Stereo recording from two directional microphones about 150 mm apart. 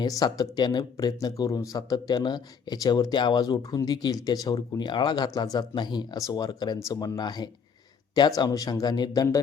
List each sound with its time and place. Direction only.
0.0 s speech: 25° left (ahead or behind)